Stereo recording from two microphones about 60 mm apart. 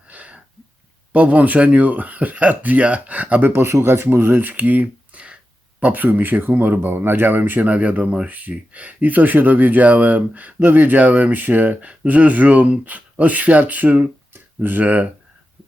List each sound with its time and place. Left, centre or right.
0.1 s a sound: right
1.1 s speech: right
3.5 s speech: right